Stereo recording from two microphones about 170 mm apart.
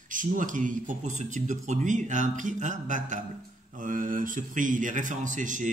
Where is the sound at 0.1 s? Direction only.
50° right (ahead or behind).